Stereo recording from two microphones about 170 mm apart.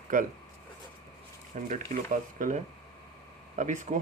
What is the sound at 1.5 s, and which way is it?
Speech, 45° right (ahead or behind).